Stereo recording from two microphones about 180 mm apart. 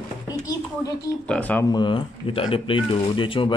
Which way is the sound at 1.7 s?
25° left (ahead or behind).